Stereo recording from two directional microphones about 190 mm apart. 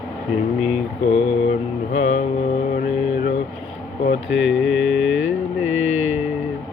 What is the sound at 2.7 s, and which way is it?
Mantra, 45° left (ahead or behind).